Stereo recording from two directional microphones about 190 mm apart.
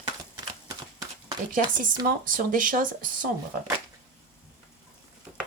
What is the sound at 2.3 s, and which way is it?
Speech, 45° right (ahead or behind).